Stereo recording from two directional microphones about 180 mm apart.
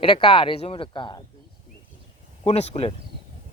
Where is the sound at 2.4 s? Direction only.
35° left (ahead or behind).